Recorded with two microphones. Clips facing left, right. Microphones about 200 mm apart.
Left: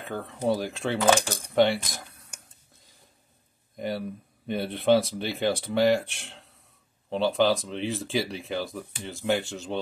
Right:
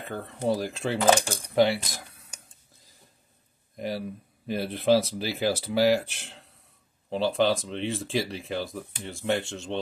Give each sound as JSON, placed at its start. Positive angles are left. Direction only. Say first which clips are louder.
{"t": 0.0, "sound": "speech", "louder": "left 1 dB", "side_deg": 0}
{"t": 3.7, "sound": "speech", "louder": "left 1 dB", "side_deg": 0}